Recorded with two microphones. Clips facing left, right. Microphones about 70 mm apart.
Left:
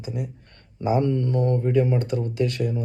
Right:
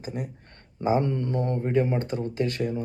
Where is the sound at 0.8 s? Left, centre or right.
Right.